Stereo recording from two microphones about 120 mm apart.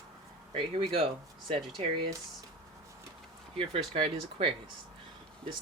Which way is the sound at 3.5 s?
50° right (ahead or behind).